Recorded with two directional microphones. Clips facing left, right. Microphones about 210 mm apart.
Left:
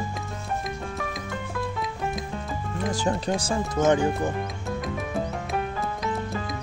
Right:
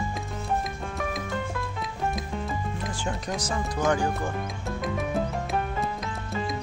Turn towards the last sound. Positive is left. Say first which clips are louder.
# even
turn(degrees=0)  # may be behind; listen again after turning